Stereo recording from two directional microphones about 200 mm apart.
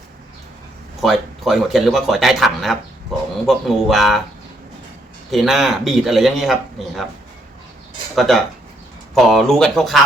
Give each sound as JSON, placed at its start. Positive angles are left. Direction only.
{"t": 1.0, "sound": "speech", "side_deg": 0}
{"t": 3.1, "sound": "chicken", "side_deg": 0}
{"t": 3.4, "sound": "speech", "side_deg": 0}
{"t": 5.3, "sound": "speech", "side_deg": 0}
{"t": 8.1, "sound": "speech", "side_deg": 0}